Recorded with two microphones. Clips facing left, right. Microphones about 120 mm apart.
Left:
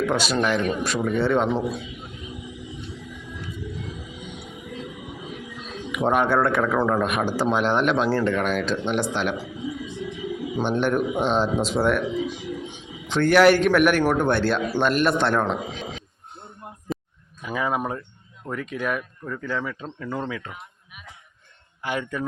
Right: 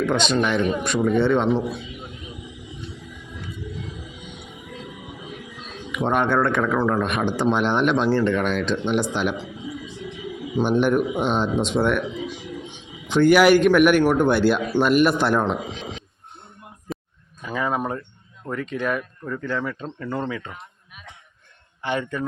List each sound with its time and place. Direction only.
0.0 s speech: 5° left (ahead or behind)
5.9 s speech: 5° left (ahead or behind)
10.6 s speech: 5° right (ahead or behind)
13.1 s speech: 5° right (ahead or behind)
16.9 s a sound: centre (ahead or behind)
17.4 s speech: 10° left (ahead or behind)
21.8 s speech: 5° left (ahead or behind)